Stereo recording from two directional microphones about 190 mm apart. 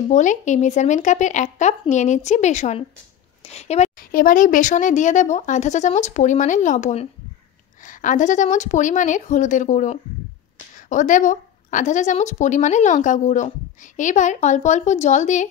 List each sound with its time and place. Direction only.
0.1 s a woman's voice: 40° left (ahead or behind)